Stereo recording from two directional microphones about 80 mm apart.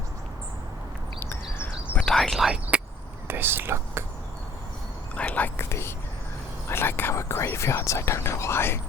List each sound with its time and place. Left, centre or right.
1.2 s a sound: left
2.0 s speech: centre
3.2 s speech: right
5.1 s speech: centre
5.5 s speech: left